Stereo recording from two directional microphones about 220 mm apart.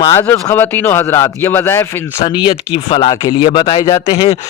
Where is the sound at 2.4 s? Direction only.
20° left (ahead or behind).